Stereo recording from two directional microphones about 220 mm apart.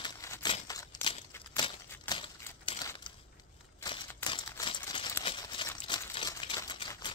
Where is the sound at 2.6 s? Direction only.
20° left (ahead or behind).